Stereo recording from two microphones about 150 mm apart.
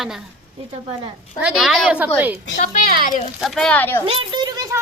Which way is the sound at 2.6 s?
65° left (ahead or behind).